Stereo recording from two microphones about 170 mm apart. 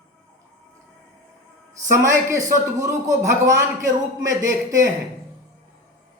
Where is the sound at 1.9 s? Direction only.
15° right (ahead or behind).